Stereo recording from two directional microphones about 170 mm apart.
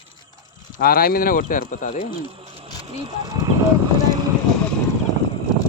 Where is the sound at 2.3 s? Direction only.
35° right (ahead or behind).